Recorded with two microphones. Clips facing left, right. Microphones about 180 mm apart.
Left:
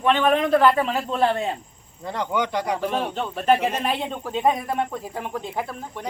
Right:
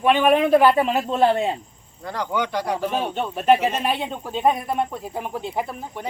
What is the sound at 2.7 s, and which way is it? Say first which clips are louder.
A man's voice: right 1 dB; 5° right (ahead or behind).